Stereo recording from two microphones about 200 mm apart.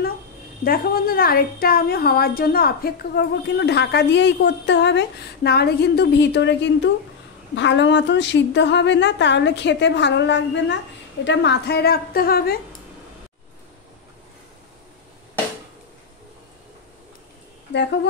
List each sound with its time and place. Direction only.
0.7 s a woman's voice: 45° left (ahead or behind)